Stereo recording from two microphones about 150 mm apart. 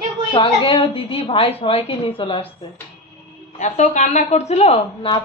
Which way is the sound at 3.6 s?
55° left (ahead or behind).